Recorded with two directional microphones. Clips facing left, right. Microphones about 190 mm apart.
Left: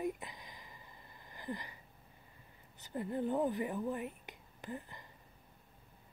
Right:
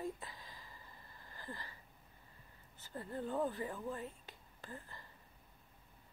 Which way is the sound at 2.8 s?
15° left (ahead or behind).